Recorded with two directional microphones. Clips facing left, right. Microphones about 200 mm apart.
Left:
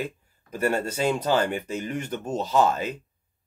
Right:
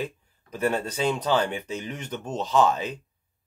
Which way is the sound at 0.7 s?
50° left (ahead or behind).